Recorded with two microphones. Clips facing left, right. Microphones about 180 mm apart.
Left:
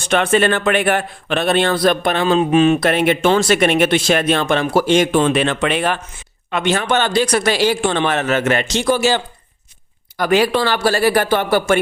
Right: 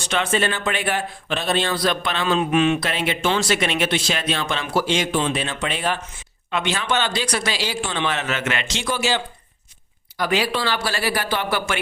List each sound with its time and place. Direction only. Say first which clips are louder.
0.0 s speech: left 7 dB; 55° left (ahead or behind)
2.2 s speech: left 5 dB; 35° left (ahead or behind)
2.8 s speech: left 8 dB; 55° left (ahead or behind)
6.5 s a man's voice: left 6 dB; 50° left (ahead or behind)